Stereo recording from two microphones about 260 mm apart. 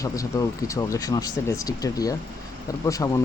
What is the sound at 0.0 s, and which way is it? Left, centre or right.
Speech, centre.